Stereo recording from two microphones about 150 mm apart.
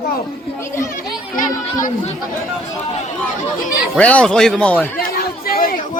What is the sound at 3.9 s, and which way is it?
Speech, 10° left (ahead or behind).